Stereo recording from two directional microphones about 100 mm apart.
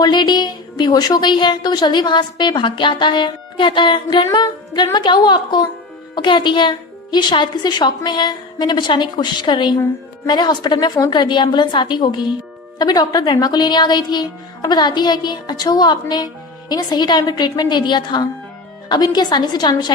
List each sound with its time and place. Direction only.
0.0 s a woman's voice: 45° left (ahead or behind)